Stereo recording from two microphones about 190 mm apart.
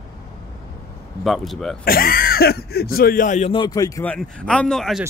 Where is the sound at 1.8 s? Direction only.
50° left (ahead or behind).